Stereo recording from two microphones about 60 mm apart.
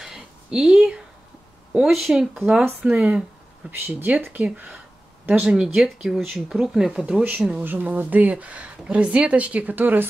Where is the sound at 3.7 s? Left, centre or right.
Right.